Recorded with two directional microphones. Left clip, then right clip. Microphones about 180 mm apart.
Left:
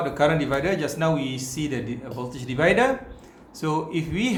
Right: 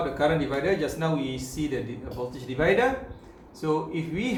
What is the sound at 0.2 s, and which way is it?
Speech, 50° left (ahead or behind).